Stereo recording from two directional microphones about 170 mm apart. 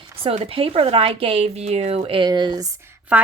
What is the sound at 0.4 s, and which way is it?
Speech, 35° right (ahead or behind).